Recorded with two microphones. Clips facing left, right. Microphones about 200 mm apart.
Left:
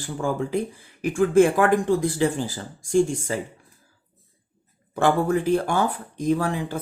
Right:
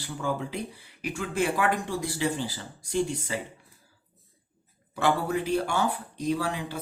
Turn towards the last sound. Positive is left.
turn(degrees=50)  # may be behind; listen again after turning